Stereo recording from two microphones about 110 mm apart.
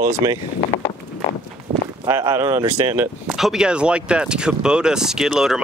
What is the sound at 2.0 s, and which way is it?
Speech, 25° right (ahead or behind).